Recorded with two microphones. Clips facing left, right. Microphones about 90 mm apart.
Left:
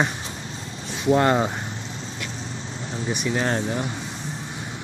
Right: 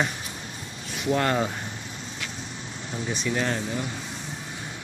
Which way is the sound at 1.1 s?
25° left (ahead or behind).